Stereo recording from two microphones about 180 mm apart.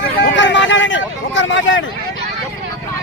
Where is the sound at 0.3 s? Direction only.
90° left.